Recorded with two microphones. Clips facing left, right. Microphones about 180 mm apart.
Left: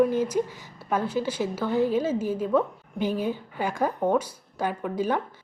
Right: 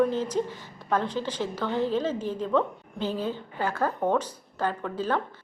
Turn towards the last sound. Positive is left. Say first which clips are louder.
# left 2 dB
turn(degrees=10)  # may be behind; listen again after turning